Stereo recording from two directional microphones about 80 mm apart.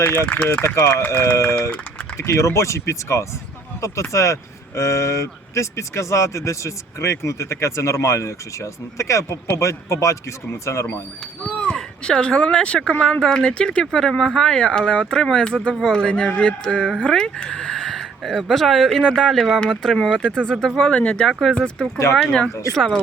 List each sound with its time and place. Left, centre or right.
0.0 s speech: left
11.4 s speech: centre